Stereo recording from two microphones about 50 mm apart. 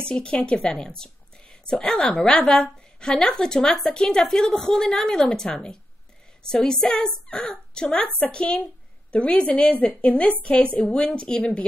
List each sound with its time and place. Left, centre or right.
0.0 s a woman's voice: centre
3.0 s a woman's voice: centre